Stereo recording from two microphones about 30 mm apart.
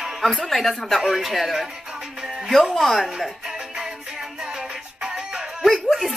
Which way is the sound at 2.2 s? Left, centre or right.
Right.